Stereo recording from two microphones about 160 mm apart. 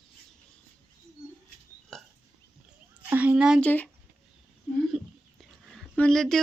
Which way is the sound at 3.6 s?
10° left (ahead or behind).